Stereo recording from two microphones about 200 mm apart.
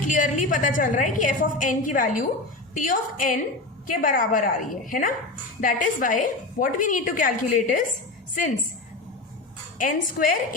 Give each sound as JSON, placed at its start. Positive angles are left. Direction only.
{"t": 0.0, "sound": "a woman's voice", "side_deg": 40}
{"t": 9.7, "sound": "a woman's voice", "side_deg": 45}